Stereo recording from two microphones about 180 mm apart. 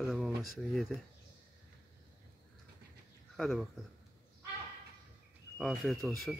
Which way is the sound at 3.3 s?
Centre (ahead or behind).